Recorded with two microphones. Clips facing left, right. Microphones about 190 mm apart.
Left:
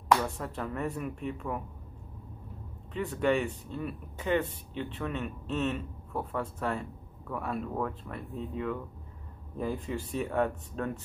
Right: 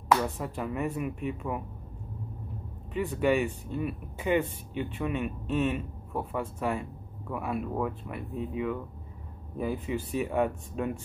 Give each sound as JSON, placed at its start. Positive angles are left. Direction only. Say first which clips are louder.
{"t": 0.1, "sound": "speech", "louder": "right 1 dB", "side_deg": -5}
{"t": 2.9, "sound": "speech", "louder": "right 2 dB", "side_deg": -5}